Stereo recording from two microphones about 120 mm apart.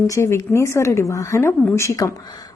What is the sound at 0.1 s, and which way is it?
A woman's voice, 25° left (ahead or behind).